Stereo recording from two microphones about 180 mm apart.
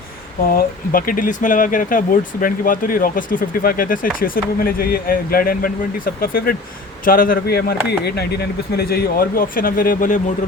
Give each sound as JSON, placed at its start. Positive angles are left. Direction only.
{"t": 0.5, "sound": "speech", "side_deg": 50}